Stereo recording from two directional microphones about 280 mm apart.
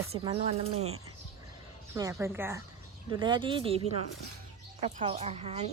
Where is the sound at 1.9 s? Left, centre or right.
Centre.